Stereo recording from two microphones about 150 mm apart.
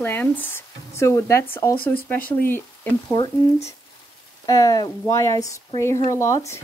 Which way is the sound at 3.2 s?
35° left (ahead or behind).